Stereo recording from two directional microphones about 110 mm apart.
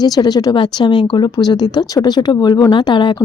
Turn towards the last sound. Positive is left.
turn(degrees=45)  # may be behind; listen again after turning